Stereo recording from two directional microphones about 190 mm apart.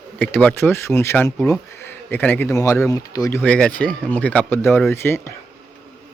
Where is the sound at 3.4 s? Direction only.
5° left (ahead or behind).